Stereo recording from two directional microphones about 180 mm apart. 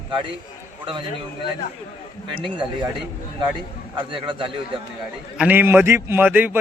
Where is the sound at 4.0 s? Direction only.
30° right (ahead or behind).